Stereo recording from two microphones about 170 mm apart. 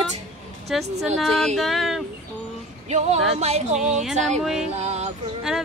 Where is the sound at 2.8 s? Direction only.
40° right (ahead or behind).